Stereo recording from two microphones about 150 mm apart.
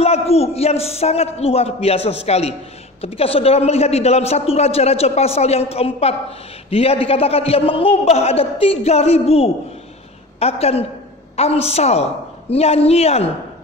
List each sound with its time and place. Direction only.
0.0 s a man's voice: 45° left (ahead or behind)